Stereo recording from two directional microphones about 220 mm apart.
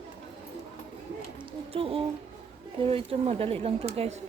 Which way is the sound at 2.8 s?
25° right (ahead or behind).